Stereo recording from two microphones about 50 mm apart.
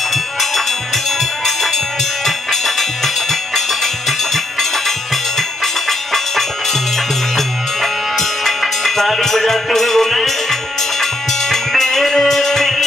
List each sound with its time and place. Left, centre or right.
0.1 s music: centre
2.2 s music: centre